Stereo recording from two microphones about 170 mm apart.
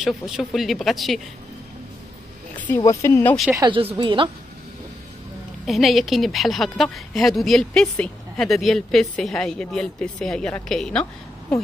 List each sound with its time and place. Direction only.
0.0 s a woman's voice: 5° right (ahead or behind)
2.8 s speech: 20° left (ahead or behind)
3.5 s a woman's voice: 30° right (ahead or behind)
5.7 s a woman's voice: centre (ahead or behind)